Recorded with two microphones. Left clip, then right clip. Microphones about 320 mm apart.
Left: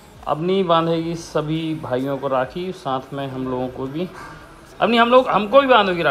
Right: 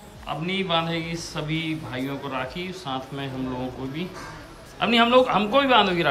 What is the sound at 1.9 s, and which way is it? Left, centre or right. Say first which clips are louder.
A man's voice: left 9 dB; centre.